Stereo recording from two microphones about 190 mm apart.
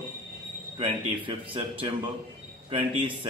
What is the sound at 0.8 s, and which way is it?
Speech, 30° right (ahead or behind).